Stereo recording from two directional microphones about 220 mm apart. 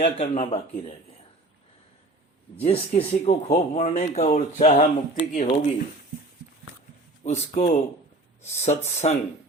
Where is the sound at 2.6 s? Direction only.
25° left (ahead or behind).